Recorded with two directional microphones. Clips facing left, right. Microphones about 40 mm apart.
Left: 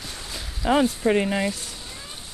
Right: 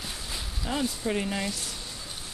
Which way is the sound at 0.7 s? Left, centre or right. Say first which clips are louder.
Left 10 dB; left.